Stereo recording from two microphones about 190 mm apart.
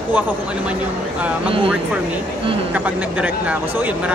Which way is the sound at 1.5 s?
30° right (ahead or behind).